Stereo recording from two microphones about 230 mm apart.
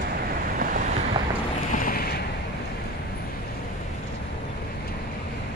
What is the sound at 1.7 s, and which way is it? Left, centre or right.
Boat, left.